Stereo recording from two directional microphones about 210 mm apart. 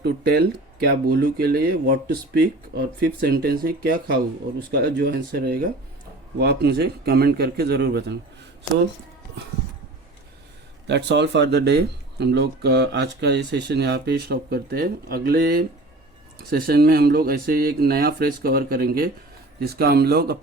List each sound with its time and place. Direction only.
0.0 s speech: 50° right (ahead or behind)
10.8 s speech: 55° right (ahead or behind)